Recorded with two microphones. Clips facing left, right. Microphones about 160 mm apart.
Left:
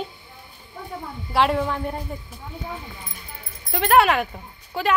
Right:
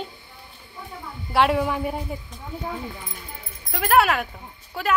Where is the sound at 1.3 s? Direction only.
Centre (ahead or behind).